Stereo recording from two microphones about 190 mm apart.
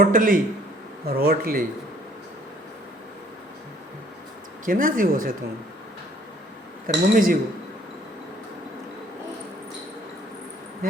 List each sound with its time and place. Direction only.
0.0 s speech: 45° right (ahead or behind)
1.0 s speech: 55° right (ahead or behind)
4.6 s speech: 45° right (ahead or behind)
6.8 s speech: 45° right (ahead or behind)